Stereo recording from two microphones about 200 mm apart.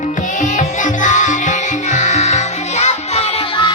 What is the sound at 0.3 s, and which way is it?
Music, 40° left (ahead or behind).